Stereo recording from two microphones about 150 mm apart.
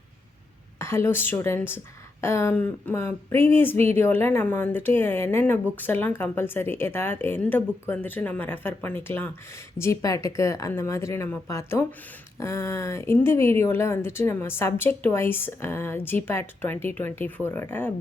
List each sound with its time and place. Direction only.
0.8 s a woman's voice: 15° left (ahead or behind)